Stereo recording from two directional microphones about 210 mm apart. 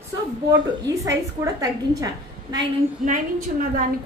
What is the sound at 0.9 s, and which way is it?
A woman's voice, 15° right (ahead or behind).